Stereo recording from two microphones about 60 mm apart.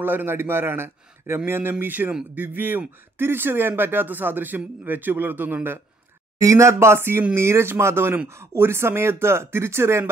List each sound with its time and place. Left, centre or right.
0.0 s a man's voice: right
6.4 s speech: right